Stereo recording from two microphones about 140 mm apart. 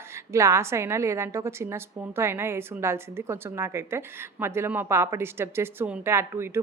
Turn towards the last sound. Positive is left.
turn(degrees=-15)  # may be behind; listen again after turning